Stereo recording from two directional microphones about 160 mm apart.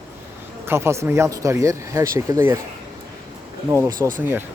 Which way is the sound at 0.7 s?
15° right (ahead or behind).